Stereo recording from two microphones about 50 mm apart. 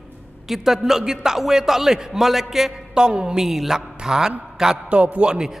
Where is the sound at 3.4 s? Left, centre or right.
Centre.